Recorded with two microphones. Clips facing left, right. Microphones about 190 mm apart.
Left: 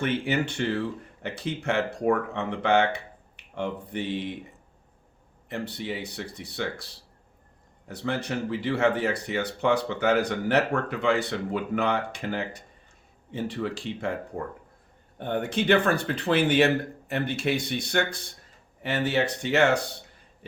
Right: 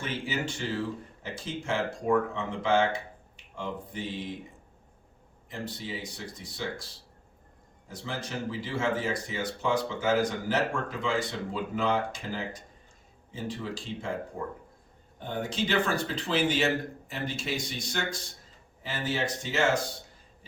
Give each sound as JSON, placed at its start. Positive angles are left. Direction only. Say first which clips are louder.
{"t": 0.0, "sound": "speech", "louder": "left 7 dB", "side_deg": 60}
{"t": 5.5, "sound": "speech", "louder": "left 5 dB", "side_deg": 65}
{"t": 15.2, "sound": "speech", "louder": "left 5 dB", "side_deg": 60}